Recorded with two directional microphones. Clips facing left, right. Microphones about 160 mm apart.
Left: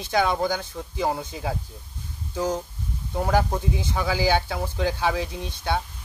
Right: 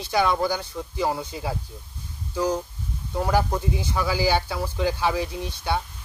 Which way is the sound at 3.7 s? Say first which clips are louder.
Right 1 dB; 20° left (ahead or behind).